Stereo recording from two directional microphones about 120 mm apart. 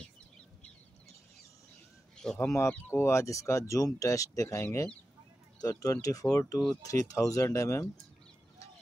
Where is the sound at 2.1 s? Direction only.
5° left (ahead or behind).